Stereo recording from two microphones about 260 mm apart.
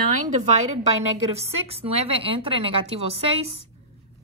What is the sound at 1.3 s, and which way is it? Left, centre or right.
A woman's voice, right.